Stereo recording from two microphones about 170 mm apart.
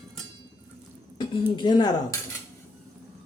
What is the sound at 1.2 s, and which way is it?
Speech, 25° left (ahead or behind).